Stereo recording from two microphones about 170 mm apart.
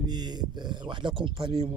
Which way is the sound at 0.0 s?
25° right (ahead or behind).